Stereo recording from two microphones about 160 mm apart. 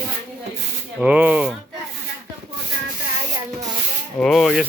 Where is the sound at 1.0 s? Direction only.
10° right (ahead or behind).